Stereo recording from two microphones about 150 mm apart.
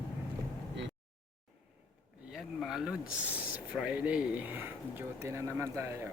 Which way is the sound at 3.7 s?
10° right (ahead or behind).